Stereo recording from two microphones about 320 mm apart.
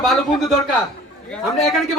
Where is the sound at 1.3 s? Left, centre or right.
Centre.